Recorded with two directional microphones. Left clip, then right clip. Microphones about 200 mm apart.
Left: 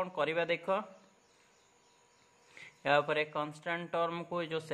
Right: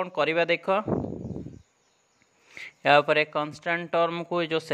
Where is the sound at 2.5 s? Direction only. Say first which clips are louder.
Right 10 dB; 40° right (ahead or behind).